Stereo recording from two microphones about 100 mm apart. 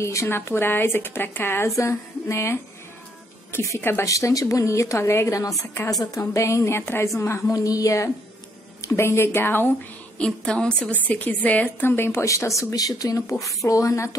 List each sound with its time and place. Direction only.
0.0 s a woman's voice: 30° left (ahead or behind)
10.1 s a woman's voice: 10° left (ahead or behind); by 14.1 s 30° left (ahead or behind)